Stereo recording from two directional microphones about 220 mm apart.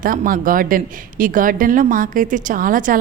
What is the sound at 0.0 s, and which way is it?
A woman's voice, 40° right (ahead or behind).